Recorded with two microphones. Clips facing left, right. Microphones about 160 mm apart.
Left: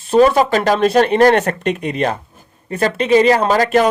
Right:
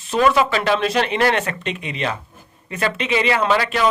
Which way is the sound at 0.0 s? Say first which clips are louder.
Left 5 dB; 35° left (ahead or behind).